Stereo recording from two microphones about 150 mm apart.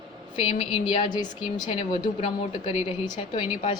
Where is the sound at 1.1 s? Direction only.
25° left (ahead or behind).